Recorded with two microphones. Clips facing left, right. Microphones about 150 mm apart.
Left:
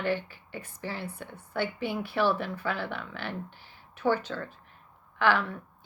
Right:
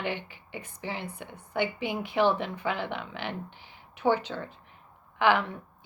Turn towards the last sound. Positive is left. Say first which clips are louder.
# right 2 dB
turn(degrees=-15)  # may be behind; listen again after turning